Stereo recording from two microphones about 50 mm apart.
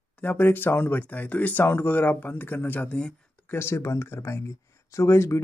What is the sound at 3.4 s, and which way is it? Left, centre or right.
Speech, left.